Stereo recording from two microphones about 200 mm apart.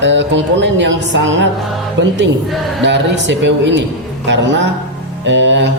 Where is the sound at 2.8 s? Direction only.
65° right (ahead or behind).